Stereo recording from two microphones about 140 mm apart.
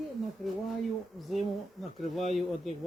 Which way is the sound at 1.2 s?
Centre (ahead or behind).